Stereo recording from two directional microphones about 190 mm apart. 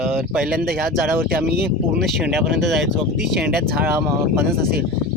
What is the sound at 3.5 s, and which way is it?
Speech, 55° right (ahead or behind).